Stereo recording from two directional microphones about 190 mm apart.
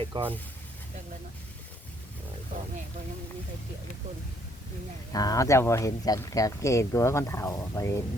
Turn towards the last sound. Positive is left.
turn(degrees=15)  # may be behind; listen again after turning